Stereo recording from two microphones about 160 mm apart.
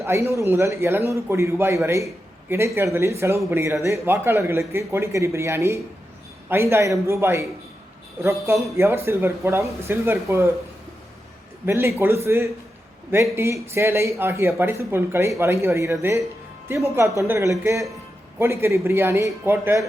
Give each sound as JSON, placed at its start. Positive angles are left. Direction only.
{"t": 0.0, "sound": "speech", "side_deg": -15}
{"t": 11.6, "sound": "speech", "side_deg": -15}